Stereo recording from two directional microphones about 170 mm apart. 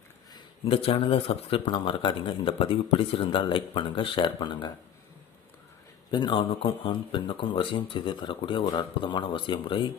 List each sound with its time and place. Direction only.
0.6 s speech: 35° left (ahead or behind)
6.1 s speech: 25° left (ahead or behind)